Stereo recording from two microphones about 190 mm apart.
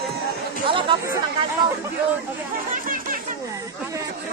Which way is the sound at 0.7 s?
25° right (ahead or behind).